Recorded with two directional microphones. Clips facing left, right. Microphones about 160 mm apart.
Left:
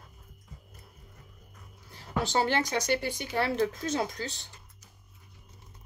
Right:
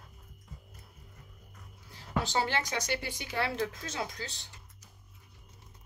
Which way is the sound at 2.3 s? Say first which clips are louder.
Left 6 dB; 55° left (ahead or behind).